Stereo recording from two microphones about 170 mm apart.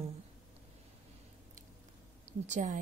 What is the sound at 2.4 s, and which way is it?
Speech, 45° right (ahead or behind).